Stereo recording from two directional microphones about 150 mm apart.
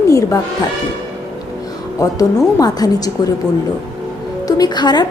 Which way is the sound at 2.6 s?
25° left (ahead or behind).